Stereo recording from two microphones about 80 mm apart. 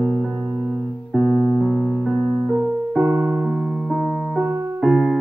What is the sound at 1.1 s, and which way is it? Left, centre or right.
Keyboard, centre.